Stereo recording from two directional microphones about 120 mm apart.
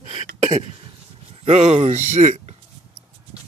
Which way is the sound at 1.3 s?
60° right (ahead or behind).